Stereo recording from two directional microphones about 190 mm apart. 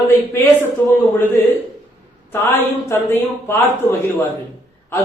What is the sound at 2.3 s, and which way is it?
Speech, 10° left (ahead or behind).